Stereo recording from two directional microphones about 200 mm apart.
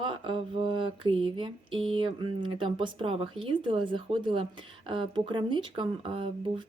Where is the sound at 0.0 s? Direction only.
25° right (ahead or behind).